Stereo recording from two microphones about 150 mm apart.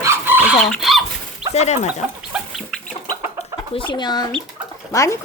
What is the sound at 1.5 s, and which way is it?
Speech, 45° left (ahead or behind).